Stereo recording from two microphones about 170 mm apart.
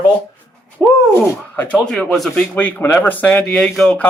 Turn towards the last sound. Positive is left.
turn(degrees=5)  # may be behind; listen again after turning